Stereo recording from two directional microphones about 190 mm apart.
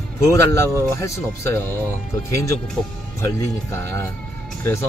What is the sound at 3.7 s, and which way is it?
Speech, 15° left (ahead or behind).